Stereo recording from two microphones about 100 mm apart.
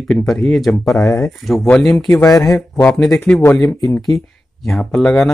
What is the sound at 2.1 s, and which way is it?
Speech, 35° left (ahead or behind).